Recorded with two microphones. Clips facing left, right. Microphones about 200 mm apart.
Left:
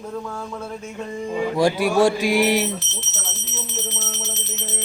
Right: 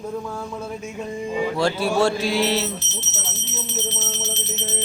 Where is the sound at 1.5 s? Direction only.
15° left (ahead or behind).